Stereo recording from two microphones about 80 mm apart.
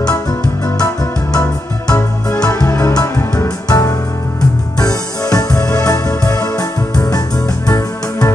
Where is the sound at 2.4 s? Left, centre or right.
Left.